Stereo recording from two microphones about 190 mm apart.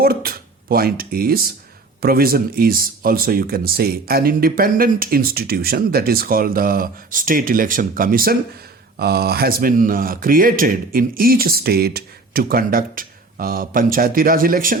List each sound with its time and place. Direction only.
0.0 s speech: 50° right (ahead or behind)